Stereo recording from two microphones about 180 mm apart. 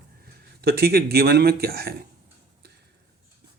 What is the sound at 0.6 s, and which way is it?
Speech, 60° right (ahead or behind).